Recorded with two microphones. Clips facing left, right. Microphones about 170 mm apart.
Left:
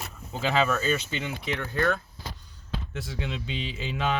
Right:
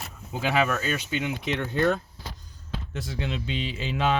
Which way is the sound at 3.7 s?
90° right.